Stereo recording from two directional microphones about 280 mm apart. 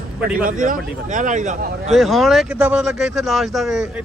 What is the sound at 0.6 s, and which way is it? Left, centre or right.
Speech, right.